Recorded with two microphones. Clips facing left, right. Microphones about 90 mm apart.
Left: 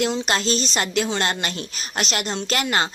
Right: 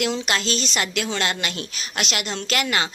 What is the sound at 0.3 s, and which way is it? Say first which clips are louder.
A woman's voice: left 2 dB; 35° left (ahead or behind).